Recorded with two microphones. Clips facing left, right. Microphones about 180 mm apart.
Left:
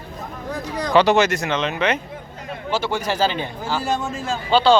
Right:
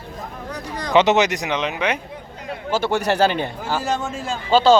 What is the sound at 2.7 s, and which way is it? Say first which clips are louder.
Speech: right 3 dB; 60° right (ahead or behind).